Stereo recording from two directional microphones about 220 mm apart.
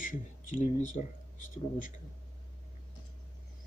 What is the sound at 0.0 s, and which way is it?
Speech, 35° left (ahead or behind).